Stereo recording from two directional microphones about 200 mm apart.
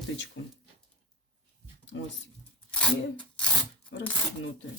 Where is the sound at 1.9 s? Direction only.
75° left (ahead or behind).